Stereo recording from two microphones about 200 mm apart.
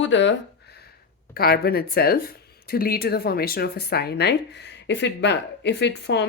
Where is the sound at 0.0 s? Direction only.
65° left (ahead or behind).